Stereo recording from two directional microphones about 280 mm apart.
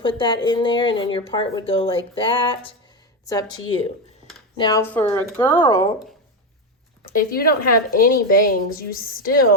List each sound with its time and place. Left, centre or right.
0.0 s a woman's voice: centre
7.2 s a woman's voice: left